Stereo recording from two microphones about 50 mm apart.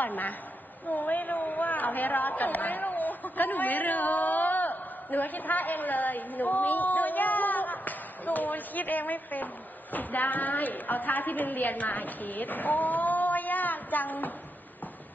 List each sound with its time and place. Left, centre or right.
0.0 s a woman's voice: left